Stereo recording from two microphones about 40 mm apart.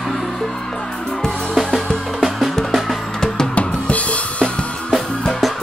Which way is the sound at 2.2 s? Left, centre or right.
Centre.